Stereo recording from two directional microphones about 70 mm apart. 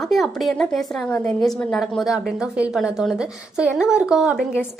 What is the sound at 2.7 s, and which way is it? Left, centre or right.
A woman's voice, centre.